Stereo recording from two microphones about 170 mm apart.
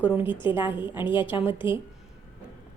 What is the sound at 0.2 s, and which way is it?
A woman's voice, 30° left (ahead or behind).